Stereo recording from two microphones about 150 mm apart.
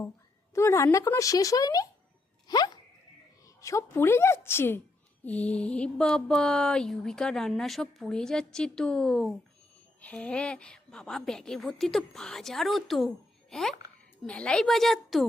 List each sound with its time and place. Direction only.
0.5 s a woman's voice: 20° left (ahead or behind); by 15.3 s centre (ahead or behind)